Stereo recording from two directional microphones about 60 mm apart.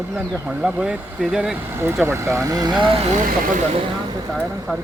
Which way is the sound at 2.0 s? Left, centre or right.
Right.